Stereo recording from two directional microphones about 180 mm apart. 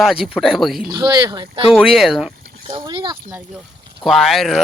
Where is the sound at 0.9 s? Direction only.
25° right (ahead or behind).